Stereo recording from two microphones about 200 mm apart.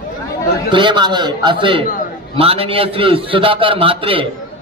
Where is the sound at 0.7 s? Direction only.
25° right (ahead or behind).